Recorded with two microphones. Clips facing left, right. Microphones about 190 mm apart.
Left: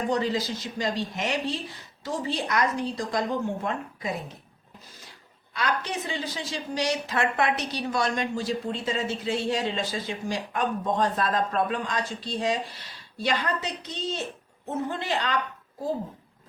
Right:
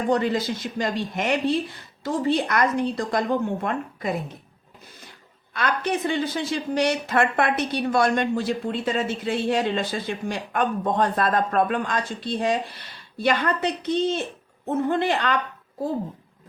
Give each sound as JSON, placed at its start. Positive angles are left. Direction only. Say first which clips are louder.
{"t": 0.1, "sound": "speech", "louder": "right 6 dB", "side_deg": -55}
{"t": 5.5, "sound": "speech", "louder": "right 4 dB", "side_deg": -60}